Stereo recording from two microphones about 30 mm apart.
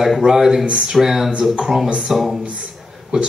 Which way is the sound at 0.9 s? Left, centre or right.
Centre.